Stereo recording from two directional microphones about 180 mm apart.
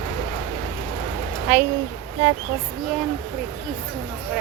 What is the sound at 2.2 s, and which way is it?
Speech, 30° right (ahead or behind).